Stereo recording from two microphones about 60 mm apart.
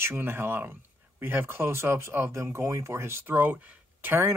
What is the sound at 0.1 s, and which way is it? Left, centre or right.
Speech, right.